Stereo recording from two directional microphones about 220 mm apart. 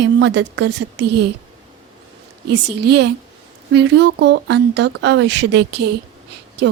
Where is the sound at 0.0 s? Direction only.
50° right (ahead or behind).